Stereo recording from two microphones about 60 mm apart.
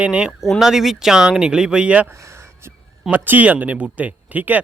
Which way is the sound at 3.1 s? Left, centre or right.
Right.